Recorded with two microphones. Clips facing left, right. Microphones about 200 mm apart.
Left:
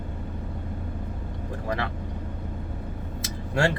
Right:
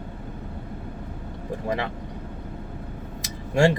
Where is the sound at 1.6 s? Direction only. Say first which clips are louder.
Right 2 dB; 20° right (ahead or behind).